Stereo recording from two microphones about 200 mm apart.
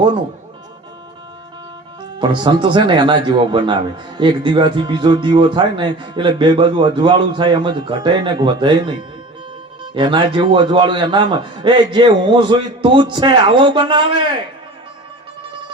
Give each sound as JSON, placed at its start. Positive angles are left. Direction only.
{"t": 2.1, "sound": "speech", "side_deg": -20}